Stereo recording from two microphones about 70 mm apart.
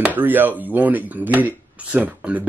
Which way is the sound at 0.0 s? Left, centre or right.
Right.